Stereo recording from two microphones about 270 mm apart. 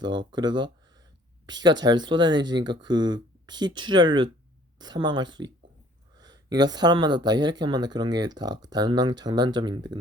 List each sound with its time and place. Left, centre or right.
0.0 s speech: centre